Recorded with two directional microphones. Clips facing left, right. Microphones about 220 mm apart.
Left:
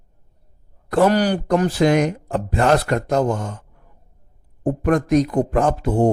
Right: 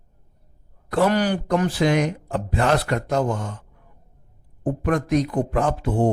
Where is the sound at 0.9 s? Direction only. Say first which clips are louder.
Left 3 dB; 40° left (ahead or behind).